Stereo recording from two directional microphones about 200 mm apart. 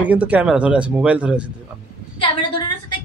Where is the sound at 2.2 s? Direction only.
25° left (ahead or behind).